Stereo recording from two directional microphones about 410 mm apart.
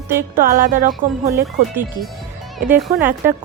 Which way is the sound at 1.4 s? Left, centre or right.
Centre.